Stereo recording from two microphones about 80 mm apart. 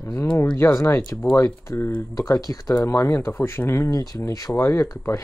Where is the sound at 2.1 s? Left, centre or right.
Left.